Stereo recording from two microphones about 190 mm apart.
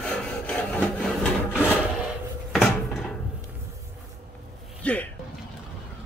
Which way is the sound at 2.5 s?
Centre (ahead or behind).